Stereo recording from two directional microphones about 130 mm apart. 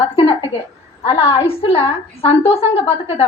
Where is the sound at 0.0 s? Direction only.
45° left (ahead or behind).